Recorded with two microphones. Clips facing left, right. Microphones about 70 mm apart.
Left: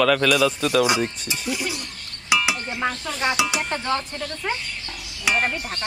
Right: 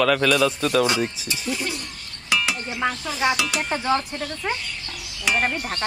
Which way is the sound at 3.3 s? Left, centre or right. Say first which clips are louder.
Left 1 dB; centre.